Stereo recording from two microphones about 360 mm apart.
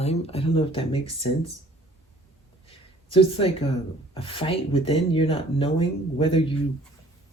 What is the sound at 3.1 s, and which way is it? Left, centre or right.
Speech, centre.